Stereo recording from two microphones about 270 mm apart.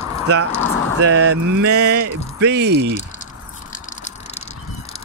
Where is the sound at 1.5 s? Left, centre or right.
Right.